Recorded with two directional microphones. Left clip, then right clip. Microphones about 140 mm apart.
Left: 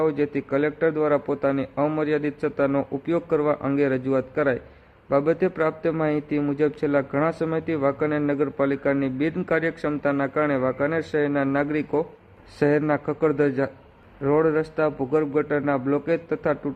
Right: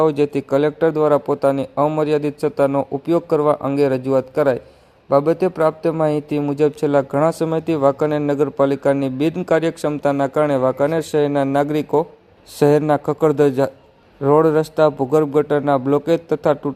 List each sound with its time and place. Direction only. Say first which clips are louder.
0.0 s a man's voice: right 7 dB; 30° right (ahead or behind)